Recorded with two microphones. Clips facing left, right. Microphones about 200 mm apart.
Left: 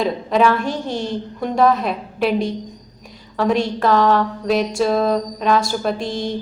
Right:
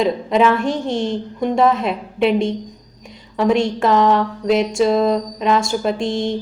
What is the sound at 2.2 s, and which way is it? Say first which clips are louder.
Speech: right 3 dB; 25° right (ahead or behind).